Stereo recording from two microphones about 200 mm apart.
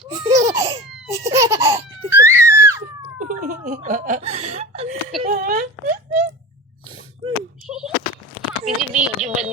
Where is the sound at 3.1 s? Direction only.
40° right (ahead or behind).